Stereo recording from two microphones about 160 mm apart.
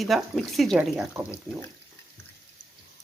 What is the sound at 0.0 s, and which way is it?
Speech, centre (ahead or behind).